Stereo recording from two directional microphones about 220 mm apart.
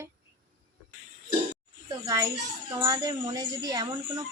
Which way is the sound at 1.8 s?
15° right (ahead or behind).